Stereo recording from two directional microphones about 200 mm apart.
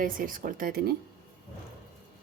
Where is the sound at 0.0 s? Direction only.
45° right (ahead or behind).